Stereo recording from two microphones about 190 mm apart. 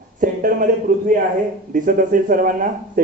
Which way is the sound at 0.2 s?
45° right (ahead or behind).